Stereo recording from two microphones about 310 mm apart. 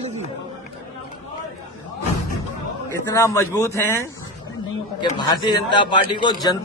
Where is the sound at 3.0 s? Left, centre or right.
Centre.